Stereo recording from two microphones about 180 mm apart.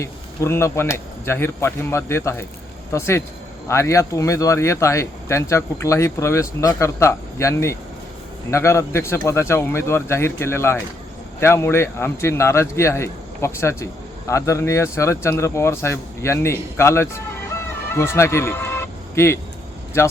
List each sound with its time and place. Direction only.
0.0 s speech: 15° left (ahead or behind)